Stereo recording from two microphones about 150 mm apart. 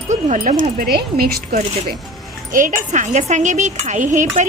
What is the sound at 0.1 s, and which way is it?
Speech, 60° right (ahead or behind).